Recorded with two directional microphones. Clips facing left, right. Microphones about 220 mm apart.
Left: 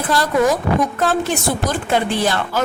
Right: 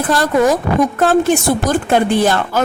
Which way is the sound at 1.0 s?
50° right (ahead or behind).